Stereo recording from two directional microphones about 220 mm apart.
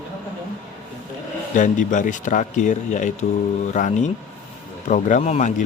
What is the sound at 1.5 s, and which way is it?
Speech, 35° left (ahead or behind).